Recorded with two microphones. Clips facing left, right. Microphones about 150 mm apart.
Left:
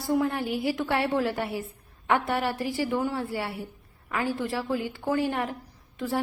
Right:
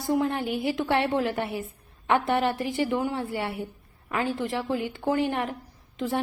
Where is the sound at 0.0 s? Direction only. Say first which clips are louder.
Even; 20° right (ahead or behind).